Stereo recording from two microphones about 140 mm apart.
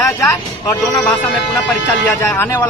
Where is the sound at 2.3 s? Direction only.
15° left (ahead or behind).